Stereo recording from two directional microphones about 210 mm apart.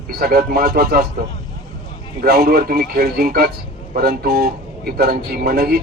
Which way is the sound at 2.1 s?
45° right (ahead or behind).